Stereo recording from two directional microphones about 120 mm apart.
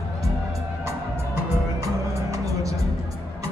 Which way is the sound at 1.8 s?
25° right (ahead or behind).